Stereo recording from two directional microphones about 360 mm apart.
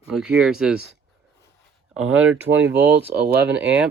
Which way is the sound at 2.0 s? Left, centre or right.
Right.